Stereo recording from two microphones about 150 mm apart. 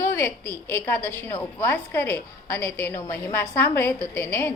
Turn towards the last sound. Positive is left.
turn(degrees=15)  # may be behind; listen again after turning